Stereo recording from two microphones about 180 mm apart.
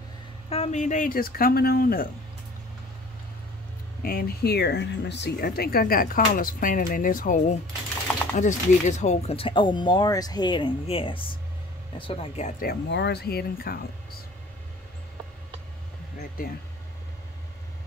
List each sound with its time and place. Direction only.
0.5 s speech: 40° left (ahead or behind); by 2.0 s 55° left (ahead or behind)
4.0 s speech: 55° left (ahead or behind); by 12.6 s 40° left (ahead or behind)
12.6 s speech: 75° left (ahead or behind); by 13.8 s 60° left (ahead or behind)